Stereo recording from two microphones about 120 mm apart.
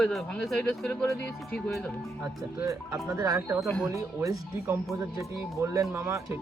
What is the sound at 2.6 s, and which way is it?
Speech, 25° right (ahead or behind).